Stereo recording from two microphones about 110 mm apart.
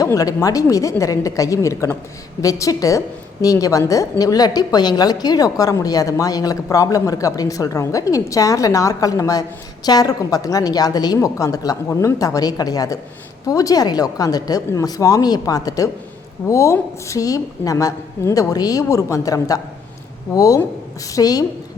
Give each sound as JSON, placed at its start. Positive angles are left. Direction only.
{"t": 0.0, "sound": "a woman's voice", "side_deg": 30}